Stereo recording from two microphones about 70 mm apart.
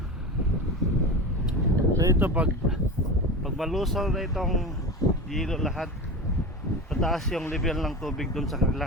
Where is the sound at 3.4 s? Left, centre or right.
Centre.